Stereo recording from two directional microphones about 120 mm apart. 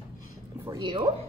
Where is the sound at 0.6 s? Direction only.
40° right (ahead or behind).